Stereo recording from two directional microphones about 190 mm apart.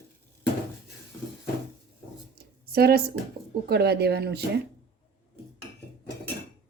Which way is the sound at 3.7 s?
60° right (ahead or behind).